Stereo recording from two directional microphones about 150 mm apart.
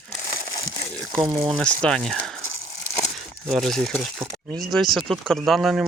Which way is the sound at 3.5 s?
Centre (ahead or behind).